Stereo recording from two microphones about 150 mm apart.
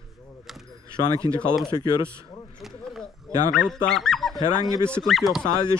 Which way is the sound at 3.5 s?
5° left (ahead or behind).